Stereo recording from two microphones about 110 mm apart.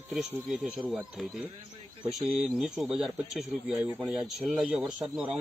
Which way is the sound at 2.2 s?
5° right (ahead or behind).